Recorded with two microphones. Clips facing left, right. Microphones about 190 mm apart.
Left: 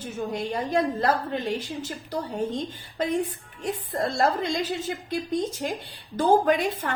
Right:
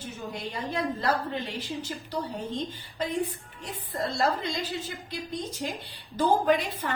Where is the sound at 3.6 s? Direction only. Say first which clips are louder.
Left 5 dB; 50° left (ahead or behind).